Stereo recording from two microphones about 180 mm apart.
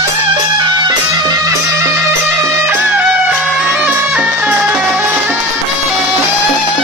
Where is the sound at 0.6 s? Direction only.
20° right (ahead or behind).